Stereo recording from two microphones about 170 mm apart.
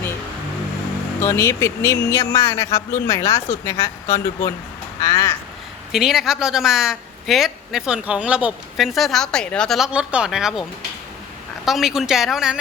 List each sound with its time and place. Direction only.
1.2 s a man's voice: 15° left (ahead or behind)
4.9 s crow: 20° left (ahead or behind)
5.9 s a woman's voice: centre (ahead or behind)